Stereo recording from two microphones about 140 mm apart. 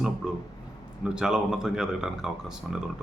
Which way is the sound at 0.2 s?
5° right (ahead or behind).